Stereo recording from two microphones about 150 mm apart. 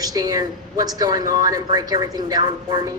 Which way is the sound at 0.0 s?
25° right (ahead or behind).